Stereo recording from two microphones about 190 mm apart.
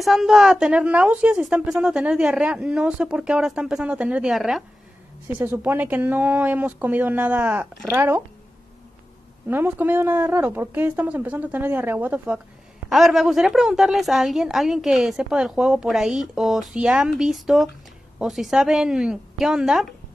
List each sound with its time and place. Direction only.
0.0 s a woman's voice: centre (ahead or behind)
9.5 s a woman's voice: 10° right (ahead or behind)